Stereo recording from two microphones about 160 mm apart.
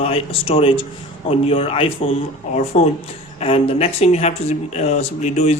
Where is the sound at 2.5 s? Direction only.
45° left (ahead or behind).